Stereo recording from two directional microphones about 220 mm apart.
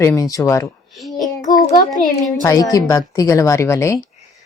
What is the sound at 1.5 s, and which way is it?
Speech, 40° left (ahead or behind).